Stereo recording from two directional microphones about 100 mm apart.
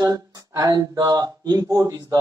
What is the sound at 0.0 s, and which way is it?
Speech, 40° right (ahead or behind).